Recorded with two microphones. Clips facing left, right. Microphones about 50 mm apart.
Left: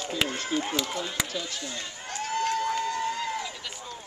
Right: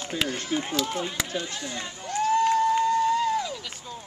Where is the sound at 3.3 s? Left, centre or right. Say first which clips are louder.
Right 6 dB; left.